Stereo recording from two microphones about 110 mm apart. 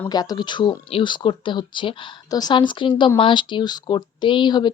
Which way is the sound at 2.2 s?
35° left (ahead or behind).